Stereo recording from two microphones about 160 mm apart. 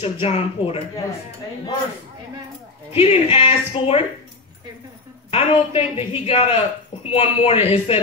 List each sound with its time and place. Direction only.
0.0 s a woman's voice: 40° left (ahead or behind)
3.0 s a woman's voice: 40° left (ahead or behind)
5.3 s a woman's voice: 40° left (ahead or behind)